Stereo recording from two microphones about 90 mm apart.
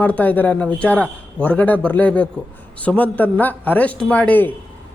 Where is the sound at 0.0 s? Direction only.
15° left (ahead or behind).